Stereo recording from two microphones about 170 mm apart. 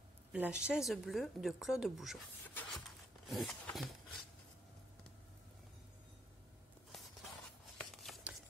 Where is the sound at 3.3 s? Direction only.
Centre (ahead or behind).